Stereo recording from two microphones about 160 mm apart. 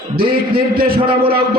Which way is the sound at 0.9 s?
35° right (ahead or behind).